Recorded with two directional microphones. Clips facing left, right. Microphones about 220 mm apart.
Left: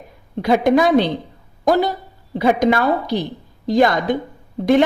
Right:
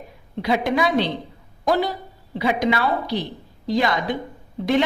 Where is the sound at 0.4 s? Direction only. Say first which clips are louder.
Left 6 dB; 50° left (ahead or behind).